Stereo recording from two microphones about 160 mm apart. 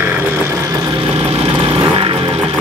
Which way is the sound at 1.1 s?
40° right (ahead or behind).